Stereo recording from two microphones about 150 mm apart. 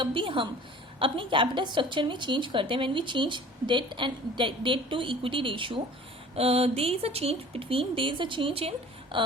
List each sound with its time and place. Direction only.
0.0 s a woman's voice: 35° right (ahead or behind)